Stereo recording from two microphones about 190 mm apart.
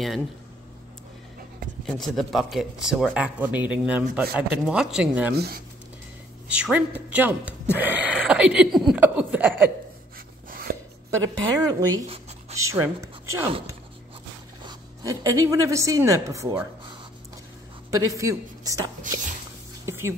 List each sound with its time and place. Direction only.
1.9 s speech: centre (ahead or behind)
5.3 s speech: 55° right (ahead or behind)
6.5 s a woman's voice: 5° right (ahead or behind)
7.7 s a sound: 10° right (ahead or behind)
10.1 s a sound: 50° right (ahead or behind)
11.6 s a woman's voice: 20° right (ahead or behind)
12.1 s writing: 35° right (ahead or behind)
12.5 s a woman's voice: 15° right (ahead or behind)
14.6 s a woman's voice: 20° right (ahead or behind)
17.9 s a woman's voice: 15° right (ahead or behind)
19.1 s a sound: 45° right (ahead or behind)
19.9 s music: 15° right (ahead or behind)